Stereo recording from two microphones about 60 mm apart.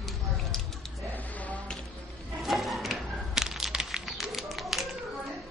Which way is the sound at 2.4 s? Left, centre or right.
Centre.